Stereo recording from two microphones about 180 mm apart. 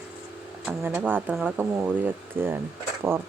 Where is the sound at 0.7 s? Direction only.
10° right (ahead or behind).